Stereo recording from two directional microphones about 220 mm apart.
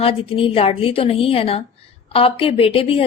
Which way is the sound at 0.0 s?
25° left (ahead or behind).